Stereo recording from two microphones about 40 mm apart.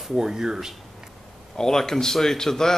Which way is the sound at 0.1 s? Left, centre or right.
Centre.